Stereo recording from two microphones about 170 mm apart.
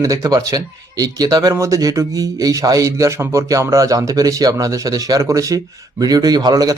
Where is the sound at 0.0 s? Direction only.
20° right (ahead or behind).